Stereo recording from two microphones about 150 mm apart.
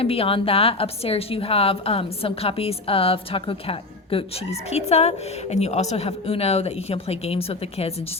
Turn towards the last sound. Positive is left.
turn(degrees=40)  # may be behind; listen again after turning